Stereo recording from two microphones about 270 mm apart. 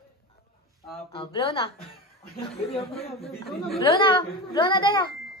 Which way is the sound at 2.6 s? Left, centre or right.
Left.